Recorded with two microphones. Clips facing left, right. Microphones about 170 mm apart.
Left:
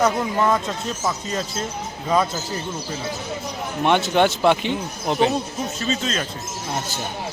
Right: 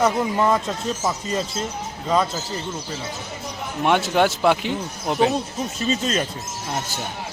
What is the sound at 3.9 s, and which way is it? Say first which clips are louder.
Speech: left 1 dB; 5° right (ahead or behind).